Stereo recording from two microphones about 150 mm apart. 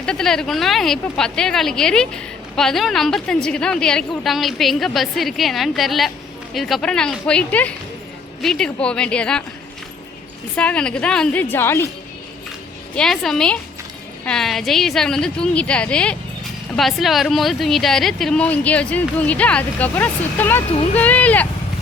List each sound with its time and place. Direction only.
0.0 s a woman's voice: 5° left (ahead or behind)
10.5 s a woman's voice: 10° left (ahead or behind)
13.0 s a woman's voice: centre (ahead or behind)